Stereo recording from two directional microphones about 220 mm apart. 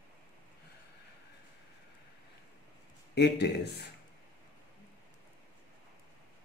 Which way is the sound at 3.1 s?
50° left (ahead or behind).